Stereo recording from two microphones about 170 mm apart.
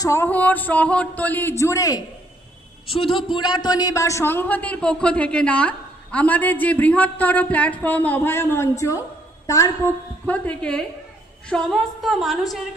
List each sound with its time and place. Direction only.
0.0 s a man's voice: 15° left (ahead or behind)
2.9 s a man's voice: 30° left (ahead or behind)
10.2 s a man's voice: 10° left (ahead or behind)